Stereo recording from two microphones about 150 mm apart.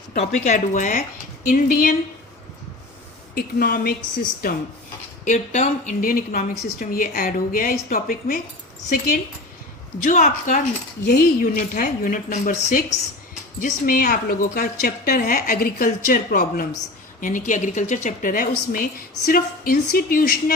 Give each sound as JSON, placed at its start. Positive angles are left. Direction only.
{"t": 0.2, "sound": "a woman's voice", "side_deg": 50}
{"t": 3.3, "sound": "a woman's voice", "side_deg": 90}
{"t": 5.2, "sound": "a woman's voice", "side_deg": 55}
{"t": 10.0, "sound": "a woman's voice", "side_deg": 55}
{"t": 11.0, "sound": "a woman's voice", "side_deg": 90}
{"t": 17.2, "sound": "a woman's voice", "side_deg": 60}